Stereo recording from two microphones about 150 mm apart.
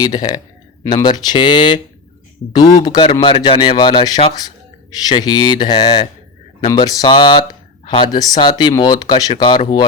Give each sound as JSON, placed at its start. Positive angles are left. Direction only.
{"t": 0.0, "sound": "speech", "side_deg": 25}
{"t": 2.8, "sound": "speech", "side_deg": 30}
{"t": 3.1, "sound": "a man's voice", "side_deg": 40}